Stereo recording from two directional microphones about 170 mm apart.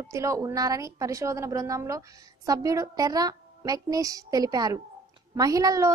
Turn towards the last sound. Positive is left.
turn(degrees=-20)  # may be behind; listen again after turning